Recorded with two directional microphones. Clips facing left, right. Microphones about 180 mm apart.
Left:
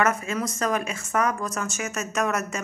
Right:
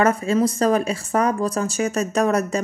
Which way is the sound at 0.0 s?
30° right (ahead or behind).